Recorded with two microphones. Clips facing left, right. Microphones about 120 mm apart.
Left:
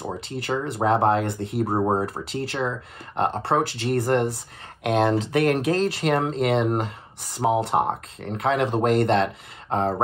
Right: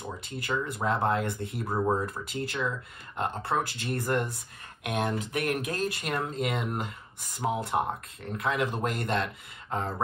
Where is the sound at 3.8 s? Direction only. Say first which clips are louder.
Left 8 dB; 60° left (ahead or behind).